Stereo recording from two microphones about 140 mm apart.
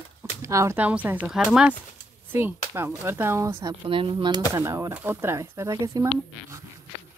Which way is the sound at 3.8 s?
40° right (ahead or behind).